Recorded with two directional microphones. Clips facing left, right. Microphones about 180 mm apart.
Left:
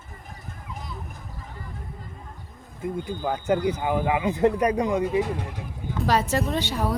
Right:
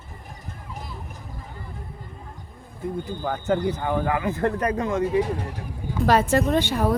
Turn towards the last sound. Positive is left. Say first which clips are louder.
# right 5 dB
turn(degrees=-55)  # may be behind; listen again after turning